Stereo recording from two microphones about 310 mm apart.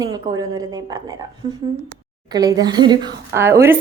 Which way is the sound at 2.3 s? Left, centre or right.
Centre.